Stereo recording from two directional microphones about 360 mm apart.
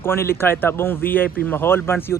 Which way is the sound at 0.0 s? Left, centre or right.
Centre.